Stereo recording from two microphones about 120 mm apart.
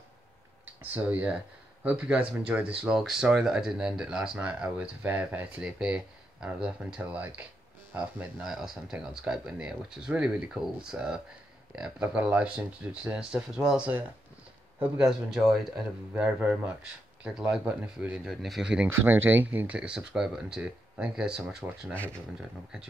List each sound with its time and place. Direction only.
0.8 s a man's voice: 15° right (ahead or behind)
18.9 s speech: 20° right (ahead or behind)
21.9 s speech: 10° left (ahead or behind)